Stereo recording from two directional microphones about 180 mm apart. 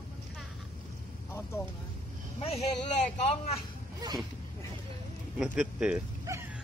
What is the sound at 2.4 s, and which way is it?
A man's voice, 35° left (ahead or behind).